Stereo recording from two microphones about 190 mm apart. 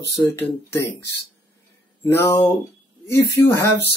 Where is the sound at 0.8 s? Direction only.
65° left (ahead or behind).